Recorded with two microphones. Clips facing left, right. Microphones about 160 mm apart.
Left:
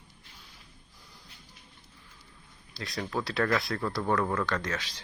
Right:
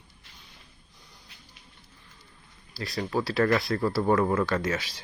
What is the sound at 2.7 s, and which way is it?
Speech, centre (ahead or behind).